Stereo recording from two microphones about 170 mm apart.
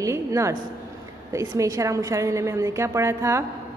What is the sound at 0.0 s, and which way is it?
A woman's voice, 15° right (ahead or behind).